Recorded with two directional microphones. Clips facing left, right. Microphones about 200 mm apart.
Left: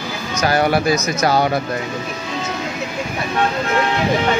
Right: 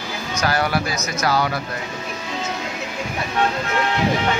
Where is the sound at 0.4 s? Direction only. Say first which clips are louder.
Left 5 dB; 20° left (ahead or behind).